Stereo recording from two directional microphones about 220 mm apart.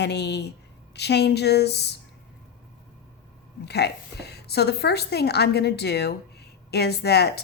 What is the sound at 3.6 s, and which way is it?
A woman's voice, 50° left (ahead or behind).